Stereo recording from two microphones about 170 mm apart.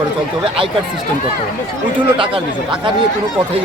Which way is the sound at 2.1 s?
30° right (ahead or behind).